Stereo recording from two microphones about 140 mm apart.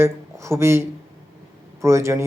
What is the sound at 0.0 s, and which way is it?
Speech, 20° right (ahead or behind).